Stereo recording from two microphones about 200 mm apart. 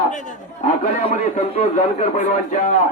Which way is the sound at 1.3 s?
35° left (ahead or behind).